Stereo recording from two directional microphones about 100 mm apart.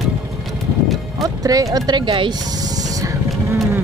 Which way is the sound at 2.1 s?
55° right (ahead or behind).